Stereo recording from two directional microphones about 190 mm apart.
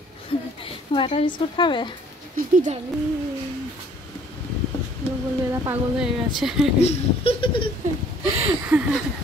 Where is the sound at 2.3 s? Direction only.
40° right (ahead or behind).